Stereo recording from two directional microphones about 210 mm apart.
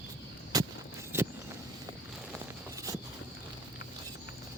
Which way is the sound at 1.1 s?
10° right (ahead or behind).